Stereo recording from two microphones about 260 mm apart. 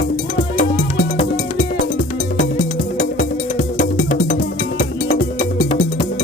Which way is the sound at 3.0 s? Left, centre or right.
Left.